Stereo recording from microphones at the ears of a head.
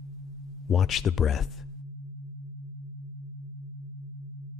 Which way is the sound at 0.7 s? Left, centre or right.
Left.